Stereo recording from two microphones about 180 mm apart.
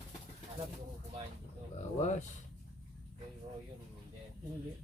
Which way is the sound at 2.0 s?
40° left (ahead or behind).